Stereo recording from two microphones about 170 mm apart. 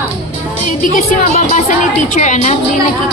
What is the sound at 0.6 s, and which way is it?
A woman's voice, 50° left (ahead or behind).